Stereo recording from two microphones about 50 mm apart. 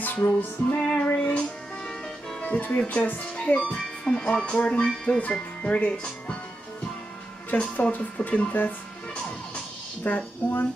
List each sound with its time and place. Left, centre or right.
0.0 s music: left
0.7 s speech: left
1.4 s music: centre
2.4 s a woman's voice: left
7.5 s speech: left
10.0 s a woman's voice: left